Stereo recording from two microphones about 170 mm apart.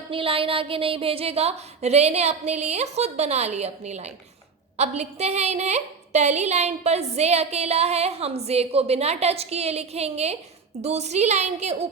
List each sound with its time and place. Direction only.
0.1 s a woman's voice: 30° right (ahead or behind)